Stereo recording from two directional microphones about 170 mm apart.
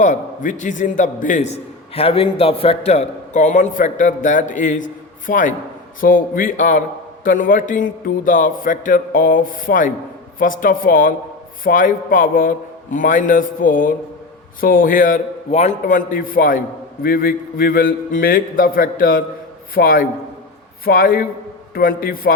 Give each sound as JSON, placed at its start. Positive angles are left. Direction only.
{"t": 0.0, "sound": "a man's voice", "side_deg": 45}